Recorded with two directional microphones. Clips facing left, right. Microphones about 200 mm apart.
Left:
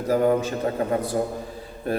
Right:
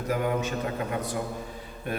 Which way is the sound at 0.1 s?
35° left (ahead or behind).